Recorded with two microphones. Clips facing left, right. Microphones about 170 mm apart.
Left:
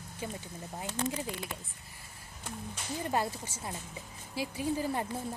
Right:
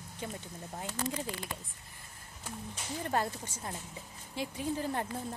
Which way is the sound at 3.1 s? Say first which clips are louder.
Even; 10° left (ahead or behind).